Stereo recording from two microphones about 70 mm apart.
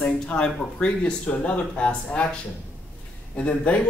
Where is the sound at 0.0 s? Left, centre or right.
Centre.